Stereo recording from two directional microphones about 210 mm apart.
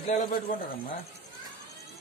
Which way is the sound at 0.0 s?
35° left (ahead or behind).